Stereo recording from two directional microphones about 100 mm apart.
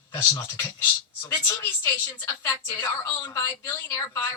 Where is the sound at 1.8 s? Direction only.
25° left (ahead or behind).